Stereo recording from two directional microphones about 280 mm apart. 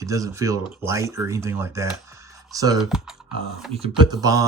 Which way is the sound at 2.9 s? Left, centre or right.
Centre.